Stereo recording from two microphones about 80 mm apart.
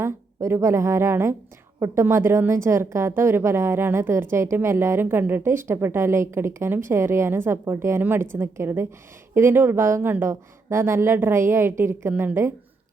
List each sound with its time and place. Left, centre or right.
0.0 s a woman's voice: right